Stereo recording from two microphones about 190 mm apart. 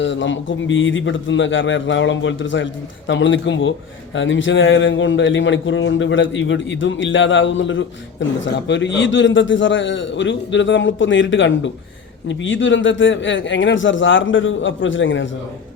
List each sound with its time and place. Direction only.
0.0 s a man's voice: 75° left (ahead or behind)